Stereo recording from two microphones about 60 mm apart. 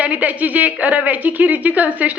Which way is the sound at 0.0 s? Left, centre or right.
Right.